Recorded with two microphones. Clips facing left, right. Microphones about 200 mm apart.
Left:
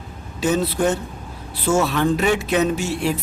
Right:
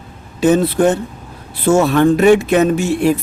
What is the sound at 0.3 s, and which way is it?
Speech, 55° right (ahead or behind).